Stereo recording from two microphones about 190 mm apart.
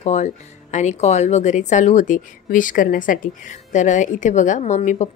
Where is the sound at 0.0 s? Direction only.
35° left (ahead or behind).